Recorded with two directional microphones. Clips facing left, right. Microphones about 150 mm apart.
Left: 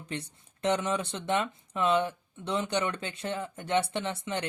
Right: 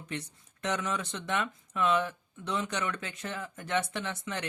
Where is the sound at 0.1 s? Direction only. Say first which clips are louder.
Left 1 dB; 30° left (ahead or behind).